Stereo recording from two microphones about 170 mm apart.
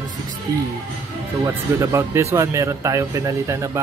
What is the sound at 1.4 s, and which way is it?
A man's voice, 20° right (ahead or behind).